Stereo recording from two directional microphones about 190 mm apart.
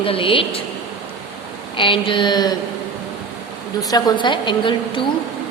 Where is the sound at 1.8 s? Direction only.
25° left (ahead or behind).